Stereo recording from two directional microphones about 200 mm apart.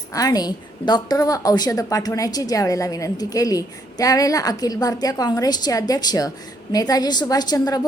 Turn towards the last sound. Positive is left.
turn(degrees=20)  # may be behind; listen again after turning